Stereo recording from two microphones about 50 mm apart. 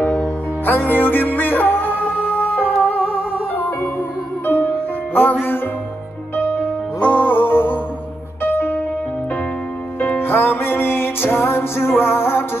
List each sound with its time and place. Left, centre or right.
0.7 s music: left
4.5 s music: left
7.2 s music: left
9.9 s music: left